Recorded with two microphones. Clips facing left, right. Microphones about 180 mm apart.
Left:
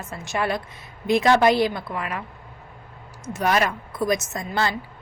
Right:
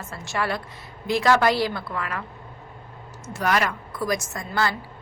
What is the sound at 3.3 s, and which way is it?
A woman's voice, 20° left (ahead or behind).